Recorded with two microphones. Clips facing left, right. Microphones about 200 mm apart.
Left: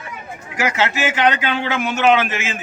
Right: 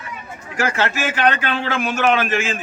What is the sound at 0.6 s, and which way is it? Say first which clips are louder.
A man's voice: left 1 dB; 20° left (ahead or behind).